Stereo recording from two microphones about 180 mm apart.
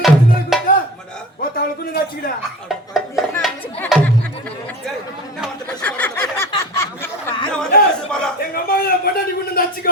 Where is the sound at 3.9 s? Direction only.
5° left (ahead or behind).